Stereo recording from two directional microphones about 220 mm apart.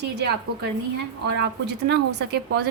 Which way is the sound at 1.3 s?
50° right (ahead or behind).